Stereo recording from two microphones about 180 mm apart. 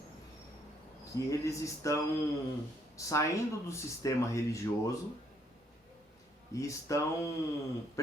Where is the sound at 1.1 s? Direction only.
15° left (ahead or behind).